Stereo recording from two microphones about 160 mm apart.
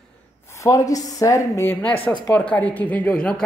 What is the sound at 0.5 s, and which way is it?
Speech, 20° left (ahead or behind).